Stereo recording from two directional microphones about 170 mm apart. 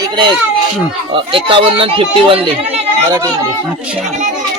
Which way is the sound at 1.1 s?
30° right (ahead or behind).